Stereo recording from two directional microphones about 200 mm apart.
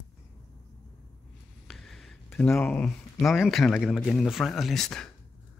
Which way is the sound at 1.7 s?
Centre (ahead or behind).